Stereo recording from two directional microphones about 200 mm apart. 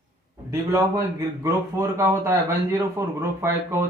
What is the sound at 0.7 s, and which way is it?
Speech, 15° right (ahead or behind).